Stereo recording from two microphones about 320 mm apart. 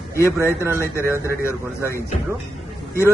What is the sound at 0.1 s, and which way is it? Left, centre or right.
Speech, centre.